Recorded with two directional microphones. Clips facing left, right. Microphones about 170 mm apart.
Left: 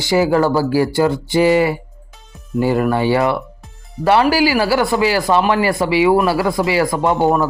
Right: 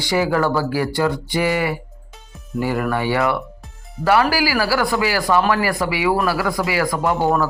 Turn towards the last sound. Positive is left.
turn(degrees=25)  # may be behind; listen again after turning